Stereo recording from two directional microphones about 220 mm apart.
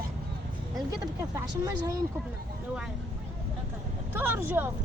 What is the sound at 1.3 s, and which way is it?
Speech, 15° right (ahead or behind).